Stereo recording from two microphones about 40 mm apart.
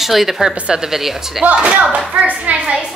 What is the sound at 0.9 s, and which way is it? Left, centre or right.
Speech, centre.